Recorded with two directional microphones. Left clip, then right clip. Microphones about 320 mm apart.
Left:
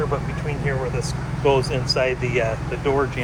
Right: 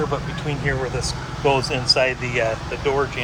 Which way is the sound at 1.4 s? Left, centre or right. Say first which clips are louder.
Right 1 dB; centre.